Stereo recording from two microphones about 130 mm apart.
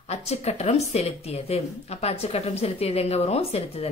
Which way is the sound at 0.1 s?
55° left (ahead or behind).